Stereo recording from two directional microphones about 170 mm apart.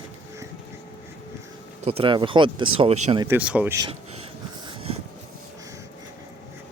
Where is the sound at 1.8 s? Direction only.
35° right (ahead or behind).